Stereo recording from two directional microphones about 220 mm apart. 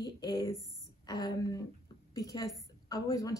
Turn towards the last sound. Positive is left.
turn(degrees=15)  # may be behind; listen again after turning